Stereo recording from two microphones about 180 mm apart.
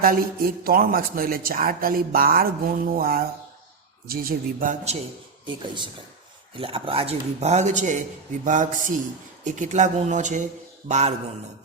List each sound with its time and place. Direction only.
0.0 s a woman's voice: 55° right (ahead or behind)
5.5 s a woman's voice: 25° right (ahead or behind)